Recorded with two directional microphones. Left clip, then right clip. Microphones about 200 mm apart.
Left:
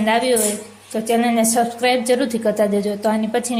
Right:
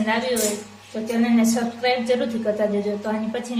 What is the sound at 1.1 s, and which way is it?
A woman's voice, 45° left (ahead or behind).